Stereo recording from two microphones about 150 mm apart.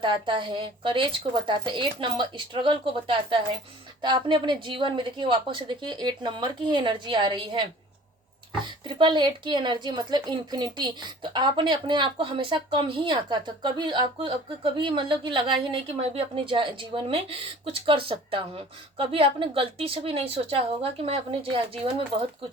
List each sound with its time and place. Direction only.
0.0 s a woman's voice: 30° right (ahead or behind)